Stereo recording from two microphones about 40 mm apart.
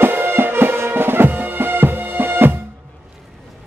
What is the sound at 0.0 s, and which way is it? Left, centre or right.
Music, right.